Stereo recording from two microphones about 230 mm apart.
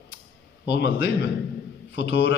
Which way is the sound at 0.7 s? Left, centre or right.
Left.